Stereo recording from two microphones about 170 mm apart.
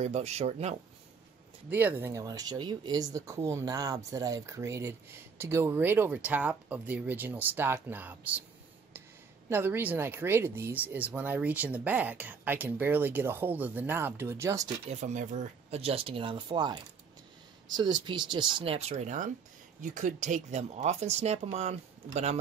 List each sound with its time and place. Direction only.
0.0 s speech: 40° right (ahead or behind)
1.7 s speech: 10° right (ahead or behind)
9.5 s speech: 10° right (ahead or behind)
14.9 s speech: 45° right (ahead or behind)